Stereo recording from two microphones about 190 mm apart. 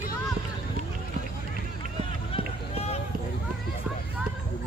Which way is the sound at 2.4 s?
50° right (ahead or behind).